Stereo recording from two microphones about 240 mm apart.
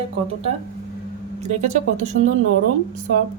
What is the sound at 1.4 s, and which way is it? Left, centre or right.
Speech, right.